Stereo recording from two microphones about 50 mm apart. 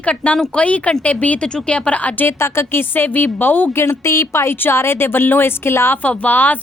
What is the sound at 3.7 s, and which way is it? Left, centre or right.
A woman's voice, left.